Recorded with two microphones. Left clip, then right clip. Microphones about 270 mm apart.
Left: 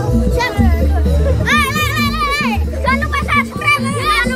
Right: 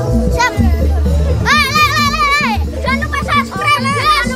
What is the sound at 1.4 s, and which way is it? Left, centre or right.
Music, right.